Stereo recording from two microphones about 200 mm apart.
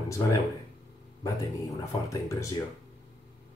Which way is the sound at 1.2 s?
15° left (ahead or behind).